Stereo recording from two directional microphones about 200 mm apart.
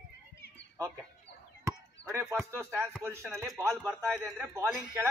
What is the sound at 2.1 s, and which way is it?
Speech, 15° right (ahead or behind).